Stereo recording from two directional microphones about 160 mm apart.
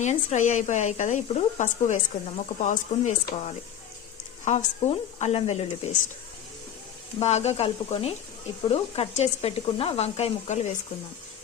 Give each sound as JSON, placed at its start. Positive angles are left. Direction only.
{"t": 0.0, "sound": "speech", "side_deg": 45}
{"t": 7.2, "sound": "speech", "side_deg": 40}